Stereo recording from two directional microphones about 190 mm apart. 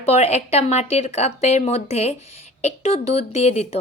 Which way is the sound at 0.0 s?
35° left (ahead or behind).